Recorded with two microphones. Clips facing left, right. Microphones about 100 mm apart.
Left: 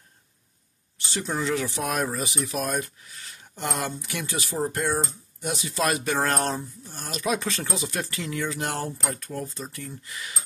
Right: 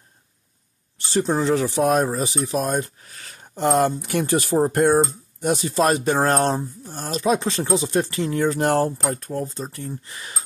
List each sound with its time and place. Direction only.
0.9 s speech: 40° right (ahead or behind)
3.0 s speech: 50° right (ahead or behind); by 10.4 s 35° right (ahead or behind)